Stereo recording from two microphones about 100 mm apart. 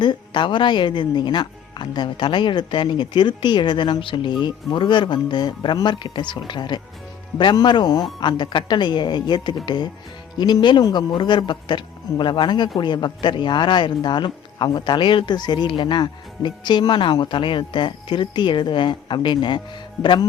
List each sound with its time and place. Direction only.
0.0 s speech: 50° left (ahead or behind)